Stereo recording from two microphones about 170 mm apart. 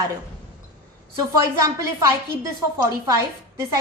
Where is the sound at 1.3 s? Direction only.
20° right (ahead or behind).